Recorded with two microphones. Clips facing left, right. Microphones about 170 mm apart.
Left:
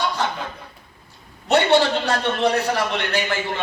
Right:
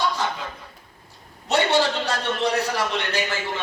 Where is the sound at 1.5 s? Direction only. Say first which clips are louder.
Left 4 dB; 60° left (ahead or behind).